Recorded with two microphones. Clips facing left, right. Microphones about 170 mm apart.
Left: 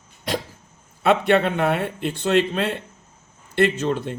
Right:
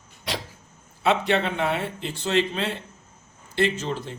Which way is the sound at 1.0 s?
55° left (ahead or behind).